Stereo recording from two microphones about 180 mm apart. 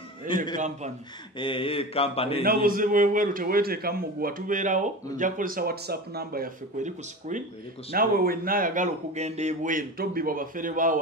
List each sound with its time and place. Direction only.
0.6 s a man's voice: 40° right (ahead or behind)
1.4 s a man's voice: 30° left (ahead or behind)
2.4 s speech: 55° right (ahead or behind)